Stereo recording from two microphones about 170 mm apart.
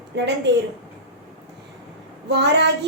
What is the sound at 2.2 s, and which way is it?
Speech, 85° right.